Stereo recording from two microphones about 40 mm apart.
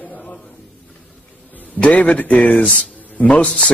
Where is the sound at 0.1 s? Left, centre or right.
Left.